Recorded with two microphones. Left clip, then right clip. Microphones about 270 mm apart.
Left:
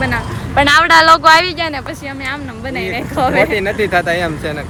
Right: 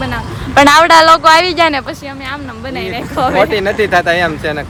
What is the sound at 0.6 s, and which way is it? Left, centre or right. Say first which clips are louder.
Speech: right 2 dB; centre.